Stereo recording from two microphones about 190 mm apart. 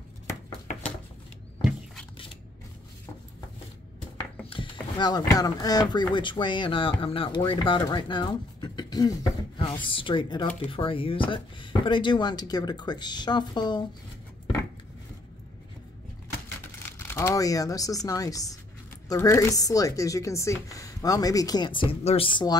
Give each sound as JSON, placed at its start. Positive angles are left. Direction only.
{"t": 4.5, "sound": "speech", "side_deg": 25}
{"t": 16.9, "sound": "speech", "side_deg": 15}